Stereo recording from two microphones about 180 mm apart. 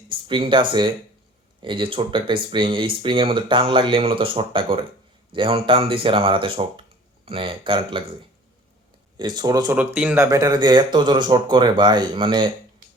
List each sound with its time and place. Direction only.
0.1 s speech: 30° right (ahead or behind)
9.1 s speech: 25° right (ahead or behind)
9.7 s speech: 5° right (ahead or behind)
10.2 s speech: 20° right (ahead or behind)